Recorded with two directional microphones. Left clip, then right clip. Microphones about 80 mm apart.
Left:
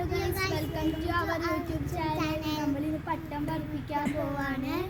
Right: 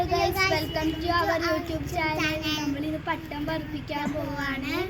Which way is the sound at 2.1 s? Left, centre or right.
Left.